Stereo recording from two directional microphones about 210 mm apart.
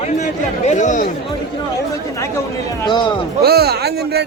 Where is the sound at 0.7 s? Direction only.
35° left (ahead or behind).